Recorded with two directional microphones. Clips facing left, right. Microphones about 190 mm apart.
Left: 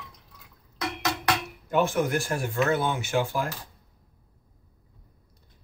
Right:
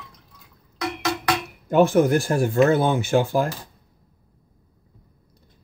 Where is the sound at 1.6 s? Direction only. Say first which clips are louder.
Right 8 dB; 40° right (ahead or behind).